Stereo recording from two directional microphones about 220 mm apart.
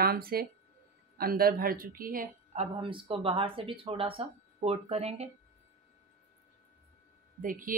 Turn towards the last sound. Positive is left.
turn(degrees=-40)  # may be behind; listen again after turning